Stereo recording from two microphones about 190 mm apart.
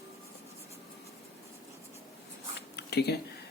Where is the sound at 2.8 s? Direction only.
60° left (ahead or behind).